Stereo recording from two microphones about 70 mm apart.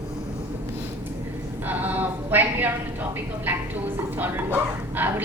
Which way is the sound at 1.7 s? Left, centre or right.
Right.